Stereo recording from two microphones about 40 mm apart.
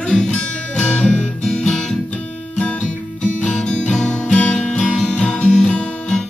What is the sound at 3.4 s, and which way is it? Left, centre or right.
Guitar, left.